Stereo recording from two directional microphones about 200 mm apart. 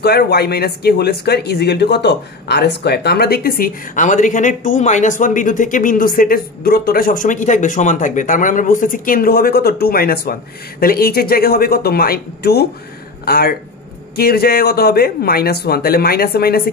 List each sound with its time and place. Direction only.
0.0 s speech: 50° left (ahead or behind)